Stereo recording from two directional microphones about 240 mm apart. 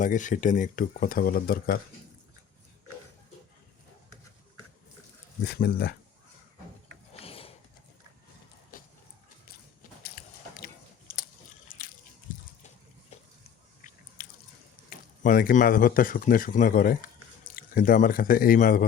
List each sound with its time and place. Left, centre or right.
0.0 s speech: left
5.5 s speech: left
7.1 s ratchet: left
11.1 s biting: left
11.7 s a sound: left
12.3 s water: left
13.8 s biting: left
14.2 s a sound: left
14.8 s speech: left